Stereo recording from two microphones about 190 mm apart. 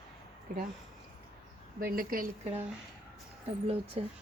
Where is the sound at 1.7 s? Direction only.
50° right (ahead or behind).